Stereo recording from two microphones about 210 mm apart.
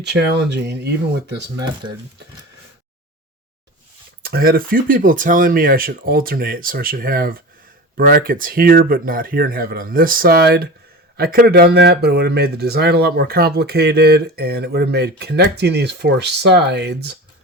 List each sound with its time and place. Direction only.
0.0 s speech: 55° right (ahead or behind)
4.2 s speech: 45° right (ahead or behind)